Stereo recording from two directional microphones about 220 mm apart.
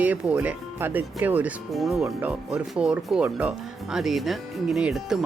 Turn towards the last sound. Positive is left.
turn(degrees=-5)  # may be behind; listen again after turning